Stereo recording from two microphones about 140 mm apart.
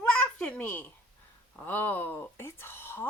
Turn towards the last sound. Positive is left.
turn(degrees=15)  # may be behind; listen again after turning